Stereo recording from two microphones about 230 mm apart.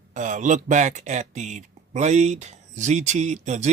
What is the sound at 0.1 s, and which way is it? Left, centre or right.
Speech, right.